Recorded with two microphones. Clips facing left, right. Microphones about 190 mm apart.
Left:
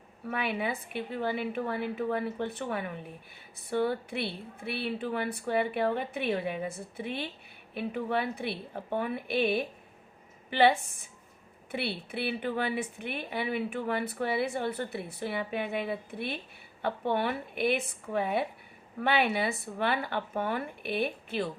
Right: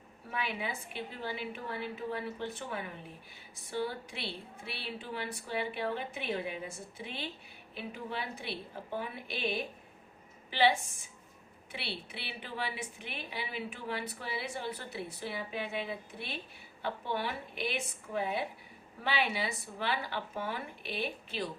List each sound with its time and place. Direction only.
0.3 s a woman's voice: 60° left (ahead or behind)